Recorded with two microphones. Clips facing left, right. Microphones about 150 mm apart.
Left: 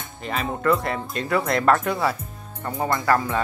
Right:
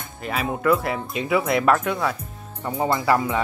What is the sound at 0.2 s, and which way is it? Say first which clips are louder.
Speech: right 1 dB; 5° right (ahead or behind).